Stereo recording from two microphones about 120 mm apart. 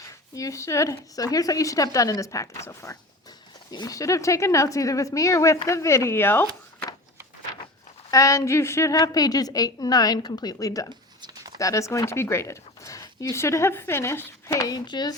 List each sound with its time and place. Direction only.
0.3 s speech: 25° left (ahead or behind)
8.1 s a woman's voice: 30° left (ahead or behind)
11.2 s a sound: 35° right (ahead or behind)
11.5 s speech: 25° left (ahead or behind)